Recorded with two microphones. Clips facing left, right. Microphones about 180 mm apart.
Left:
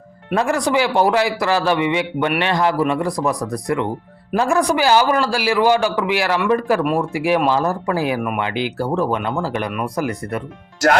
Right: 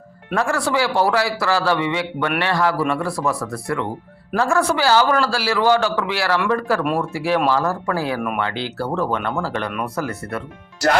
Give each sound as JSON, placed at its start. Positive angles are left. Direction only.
{"t": 0.3, "sound": "speech", "side_deg": 20}